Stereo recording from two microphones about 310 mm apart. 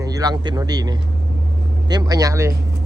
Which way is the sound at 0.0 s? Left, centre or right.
Centre.